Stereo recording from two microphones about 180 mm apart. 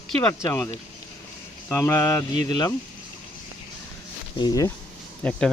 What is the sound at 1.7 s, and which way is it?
Speech, 15° left (ahead or behind).